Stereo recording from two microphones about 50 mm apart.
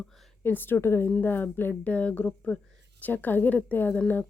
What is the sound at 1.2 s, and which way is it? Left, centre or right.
Speech, left.